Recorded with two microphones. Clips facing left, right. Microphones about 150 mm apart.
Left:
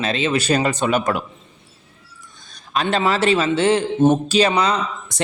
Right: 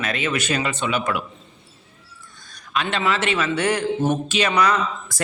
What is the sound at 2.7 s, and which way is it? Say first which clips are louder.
Speech: left 4 dB; 35° left (ahead or behind).